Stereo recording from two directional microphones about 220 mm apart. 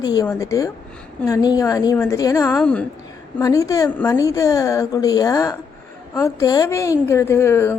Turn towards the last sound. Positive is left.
turn(degrees=10)  # may be behind; listen again after turning